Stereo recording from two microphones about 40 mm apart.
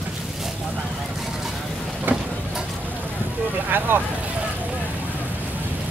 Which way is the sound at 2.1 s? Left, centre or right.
Right.